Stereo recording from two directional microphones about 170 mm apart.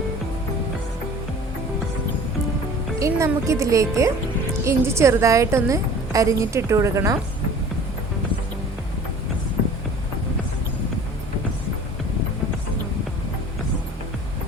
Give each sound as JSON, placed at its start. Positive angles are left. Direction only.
{"t": 3.0, "sound": "a woman's voice", "side_deg": -20}